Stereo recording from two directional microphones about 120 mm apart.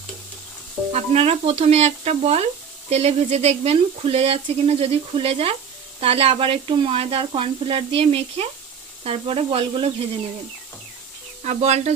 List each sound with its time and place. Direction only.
0.9 s speech: 55° right (ahead or behind)
11.4 s speech: 65° right (ahead or behind)